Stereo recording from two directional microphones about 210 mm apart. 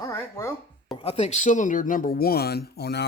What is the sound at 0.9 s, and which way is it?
Speech, 30° left (ahead or behind).